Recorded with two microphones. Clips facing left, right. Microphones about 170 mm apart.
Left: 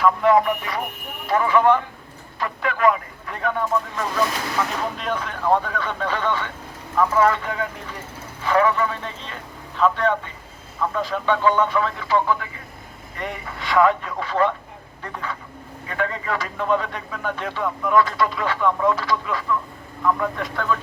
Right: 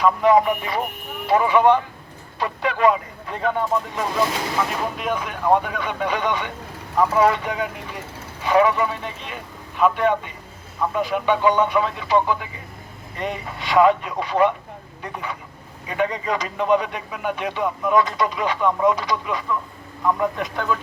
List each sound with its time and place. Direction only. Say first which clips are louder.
0.0 s a man's voice: right 1 dB; 20° right (ahead or behind)
4.9 s a man's voice: right 1 dB; 10° right (ahead or behind)